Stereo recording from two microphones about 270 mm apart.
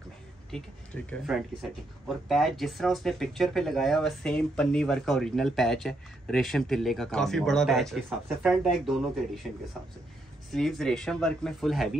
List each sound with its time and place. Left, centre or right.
0.5 s speech: centre
10.5 s speech: centre